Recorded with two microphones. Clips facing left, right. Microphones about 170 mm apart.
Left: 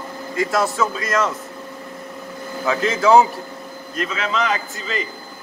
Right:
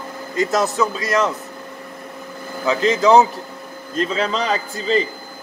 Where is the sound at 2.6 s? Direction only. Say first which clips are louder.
Right 2 dB; 20° right (ahead or behind).